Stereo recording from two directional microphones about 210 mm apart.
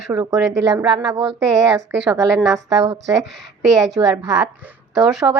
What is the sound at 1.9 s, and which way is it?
Speech, 10° right (ahead or behind).